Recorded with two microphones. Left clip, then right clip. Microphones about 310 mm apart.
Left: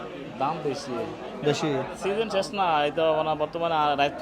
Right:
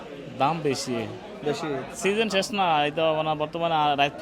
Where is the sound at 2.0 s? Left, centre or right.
Right.